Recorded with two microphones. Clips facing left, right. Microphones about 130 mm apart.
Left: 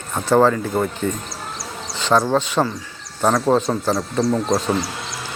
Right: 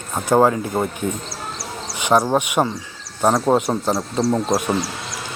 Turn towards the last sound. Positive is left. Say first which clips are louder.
# even
turn(degrees=-15)  # may be behind; listen again after turning